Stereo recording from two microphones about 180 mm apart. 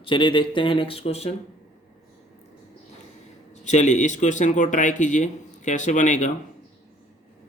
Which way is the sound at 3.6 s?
40° left (ahead or behind).